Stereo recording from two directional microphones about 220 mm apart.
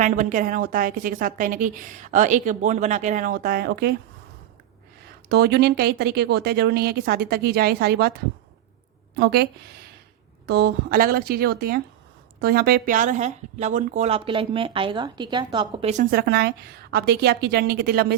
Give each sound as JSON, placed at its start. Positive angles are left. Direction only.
{"t": 0.0, "sound": "a woman's voice", "side_deg": -35}
{"t": 5.0, "sound": "speech", "side_deg": -45}
{"t": 9.1, "sound": "a woman's voice", "side_deg": -50}